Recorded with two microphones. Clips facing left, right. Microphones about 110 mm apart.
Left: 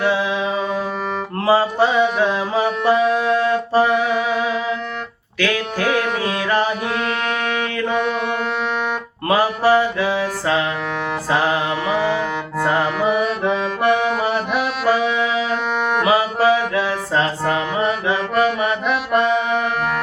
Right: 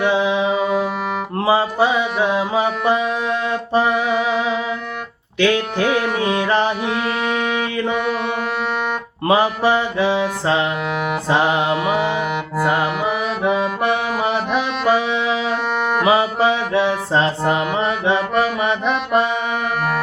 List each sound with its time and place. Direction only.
0.0 s music: 20° right (ahead or behind)
5.4 s music: 25° right (ahead or behind)
6.8 s music: 5° right (ahead or behind)
9.2 s music: 20° right (ahead or behind)
13.1 s accordion: 5° right (ahead or behind)
16.0 s mantra: 25° right (ahead or behind)
18.3 s accordion: centre (ahead or behind)